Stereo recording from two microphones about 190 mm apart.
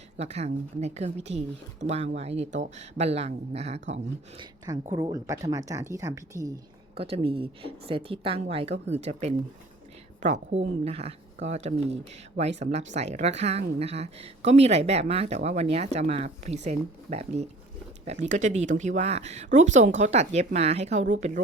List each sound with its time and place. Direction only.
0.2 s a woman's voice: 35° right (ahead or behind)
4.6 s speech: 20° right (ahead or behind)
6.9 s a woman's voice: 30° right (ahead or behind)